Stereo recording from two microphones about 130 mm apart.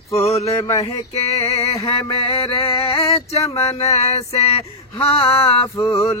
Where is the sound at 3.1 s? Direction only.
55° left (ahead or behind).